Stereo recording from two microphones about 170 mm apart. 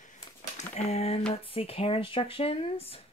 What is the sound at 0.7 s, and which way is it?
Speech, 40° left (ahead or behind).